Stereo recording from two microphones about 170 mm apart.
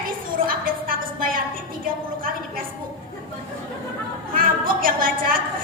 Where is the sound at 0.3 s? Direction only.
55° right (ahead or behind).